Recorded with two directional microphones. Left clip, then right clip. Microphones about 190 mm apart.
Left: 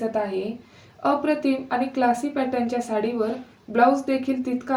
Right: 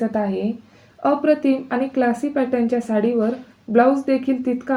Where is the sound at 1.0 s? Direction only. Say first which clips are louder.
Right 4 dB; 40° right (ahead or behind).